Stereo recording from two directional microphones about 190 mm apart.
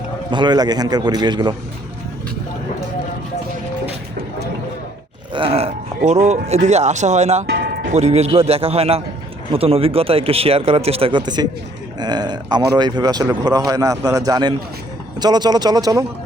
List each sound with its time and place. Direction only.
0.3 s speech: 25° right (ahead or behind)
5.3 s speech: 30° right (ahead or behind)
7.4 s music: 55° right (ahead or behind)
7.9 s speech: 35° right (ahead or behind); by 16.0 s 20° right (ahead or behind)